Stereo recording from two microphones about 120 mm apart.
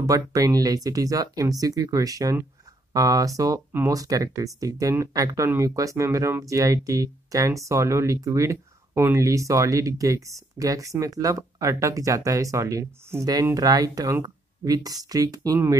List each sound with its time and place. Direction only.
0.0 s speech: 30° right (ahead or behind)